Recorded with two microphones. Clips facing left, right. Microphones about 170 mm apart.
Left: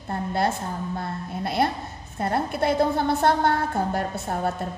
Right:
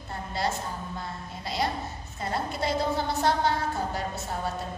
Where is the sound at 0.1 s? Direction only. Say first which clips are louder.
Left 6 dB; 55° left (ahead or behind).